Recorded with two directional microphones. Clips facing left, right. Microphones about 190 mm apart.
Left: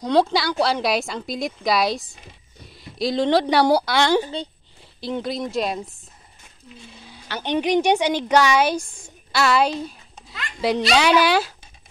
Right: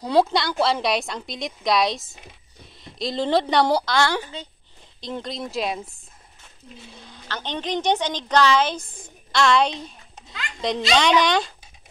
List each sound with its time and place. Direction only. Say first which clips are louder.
0.0 s a child's voice: left 1 dB; 5° right (ahead or behind)
3.9 s a woman's voice: left 4 dB; 20° left (ahead or behind)
5.0 s a child's voice: left 5 dB; 5° left (ahead or behind)
7.1 s a woman's voice: left 6 dB; 10° left (ahead or behind)